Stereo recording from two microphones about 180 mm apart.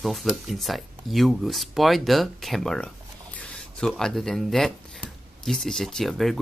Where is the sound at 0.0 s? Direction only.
Centre (ahead or behind).